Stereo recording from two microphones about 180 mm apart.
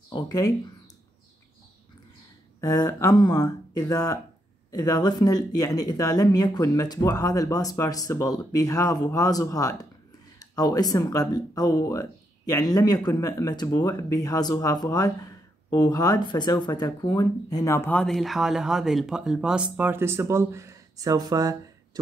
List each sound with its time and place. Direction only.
0.1 s speech: 20° left (ahead or behind)
2.6 s speech: 20° left (ahead or behind); by 21.5 s 20° right (ahead or behind)